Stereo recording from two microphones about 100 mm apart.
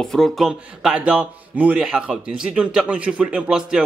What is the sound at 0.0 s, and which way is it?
A man's voice, 5° left (ahead or behind).